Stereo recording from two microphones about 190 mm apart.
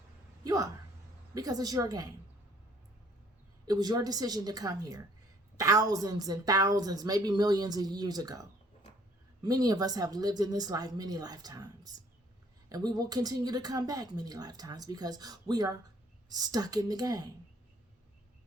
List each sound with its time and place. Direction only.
0.4 s a woman's voice: 20° right (ahead or behind)
3.7 s a woman's voice: 20° right (ahead or behind)